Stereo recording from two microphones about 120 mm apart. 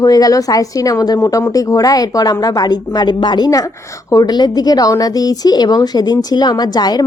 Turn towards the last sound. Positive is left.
turn(degrees=35)  # may be behind; listen again after turning